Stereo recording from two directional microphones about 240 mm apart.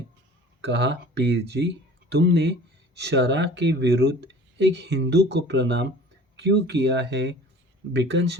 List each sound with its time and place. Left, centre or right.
0.6 s speech: right